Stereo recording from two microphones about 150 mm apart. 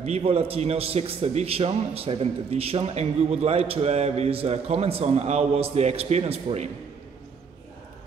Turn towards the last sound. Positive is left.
turn(degrees=-40)  # may be behind; listen again after turning